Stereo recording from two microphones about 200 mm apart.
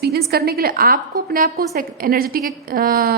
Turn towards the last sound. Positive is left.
turn(degrees=-45)  # may be behind; listen again after turning